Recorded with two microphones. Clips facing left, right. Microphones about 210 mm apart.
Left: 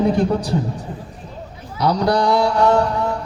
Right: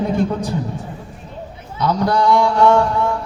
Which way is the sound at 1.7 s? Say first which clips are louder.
Even; 35° left (ahead or behind).